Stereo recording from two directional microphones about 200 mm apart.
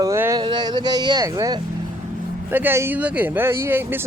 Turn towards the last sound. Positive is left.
turn(degrees=-10)  # may be behind; listen again after turning